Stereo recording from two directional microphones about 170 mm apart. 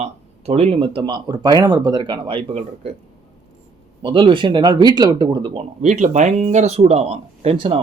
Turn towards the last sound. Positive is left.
turn(degrees=-35)  # may be behind; listen again after turning